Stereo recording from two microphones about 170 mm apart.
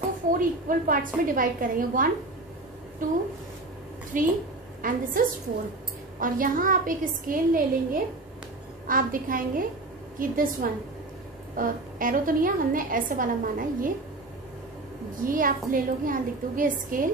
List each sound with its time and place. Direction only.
0.3 s a woman's voice: 55° right (ahead or behind)
4.1 s a woman's voice: 50° right (ahead or behind)
15.2 s a woman's voice: 55° right (ahead or behind)